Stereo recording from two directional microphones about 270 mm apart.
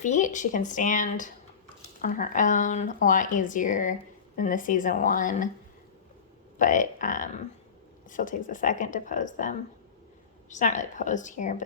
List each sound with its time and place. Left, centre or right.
0.0 s speech: left
6.6 s speech: left